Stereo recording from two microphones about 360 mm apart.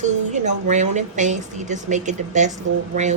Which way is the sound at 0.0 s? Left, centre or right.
Centre.